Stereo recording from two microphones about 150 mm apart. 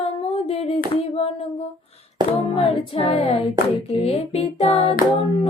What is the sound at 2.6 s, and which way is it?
Music, 40° left (ahead or behind).